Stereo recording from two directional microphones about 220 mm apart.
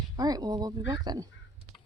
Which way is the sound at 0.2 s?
15° right (ahead or behind).